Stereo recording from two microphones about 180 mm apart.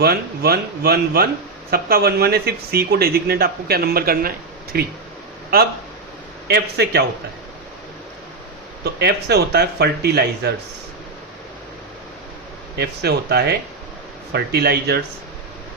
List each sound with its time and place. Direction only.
0.0 s speech: 60° right (ahead or behind)
8.8 s speech: 65° right (ahead or behind)
12.7 s speech: 65° right (ahead or behind)